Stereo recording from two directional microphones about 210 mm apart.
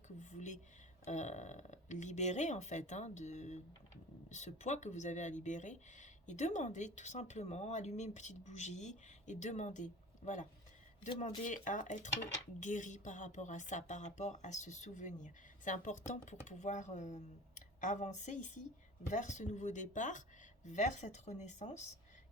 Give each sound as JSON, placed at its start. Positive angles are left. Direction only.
{"t": 0.2, "sound": "speech", "side_deg": 35}
{"t": 11.4, "sound": "speech", "side_deg": 35}